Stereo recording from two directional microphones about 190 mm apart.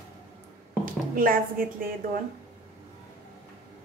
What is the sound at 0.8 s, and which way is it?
A woman's voice, 50° right (ahead or behind).